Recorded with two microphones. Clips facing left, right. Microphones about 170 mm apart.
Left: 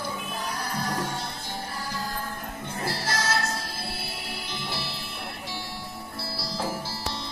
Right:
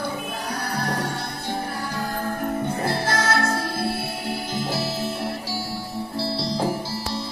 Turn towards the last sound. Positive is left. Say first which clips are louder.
# right 9 dB
turn(degrees=-20)  # may be behind; listen again after turning